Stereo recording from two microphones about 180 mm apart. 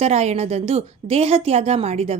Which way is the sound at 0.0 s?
35° right (ahead or behind).